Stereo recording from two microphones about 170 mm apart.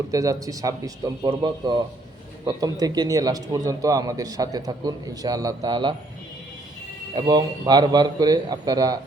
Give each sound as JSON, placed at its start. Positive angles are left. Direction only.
{"t": 0.1, "sound": "a man's voice", "side_deg": -20}
{"t": 7.1, "sound": "a man's voice", "side_deg": -25}